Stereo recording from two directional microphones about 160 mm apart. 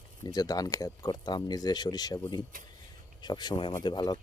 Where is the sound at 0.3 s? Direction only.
25° left (ahead or behind).